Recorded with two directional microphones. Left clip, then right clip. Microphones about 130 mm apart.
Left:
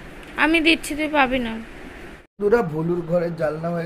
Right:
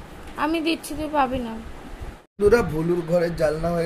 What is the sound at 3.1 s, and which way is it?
Speech, 35° right (ahead or behind).